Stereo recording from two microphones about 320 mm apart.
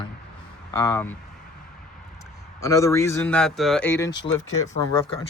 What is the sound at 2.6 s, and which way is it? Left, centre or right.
Speech, centre.